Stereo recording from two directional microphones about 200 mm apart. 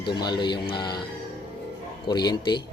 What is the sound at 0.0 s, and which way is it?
Speech, 20° left (ahead or behind).